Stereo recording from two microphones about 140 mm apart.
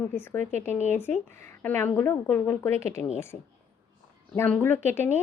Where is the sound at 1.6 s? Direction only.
15° left (ahead or behind).